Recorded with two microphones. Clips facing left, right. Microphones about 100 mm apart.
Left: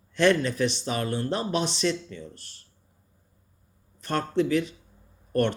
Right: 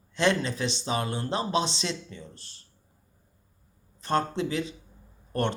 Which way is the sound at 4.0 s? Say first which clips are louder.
Right 2 dB; 25° right (ahead or behind).